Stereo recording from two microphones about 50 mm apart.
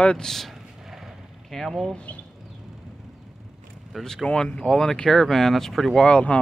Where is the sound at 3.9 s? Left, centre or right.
Centre.